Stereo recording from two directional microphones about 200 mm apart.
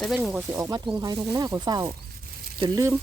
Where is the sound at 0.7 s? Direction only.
20° right (ahead or behind).